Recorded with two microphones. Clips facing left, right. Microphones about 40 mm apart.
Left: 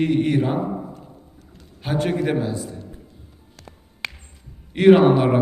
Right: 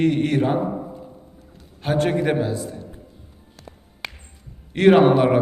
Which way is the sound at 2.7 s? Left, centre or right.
Centre.